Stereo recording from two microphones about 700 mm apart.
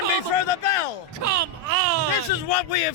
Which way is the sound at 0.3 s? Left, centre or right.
Left.